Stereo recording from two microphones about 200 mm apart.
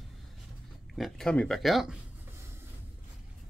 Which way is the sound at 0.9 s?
Centre (ahead or behind).